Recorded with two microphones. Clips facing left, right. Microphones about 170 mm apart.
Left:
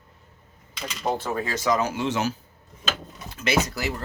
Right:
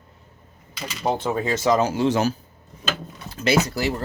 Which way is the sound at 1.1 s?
20° right (ahead or behind).